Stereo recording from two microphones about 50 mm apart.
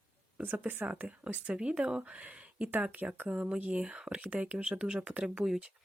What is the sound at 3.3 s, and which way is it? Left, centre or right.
Speech, centre.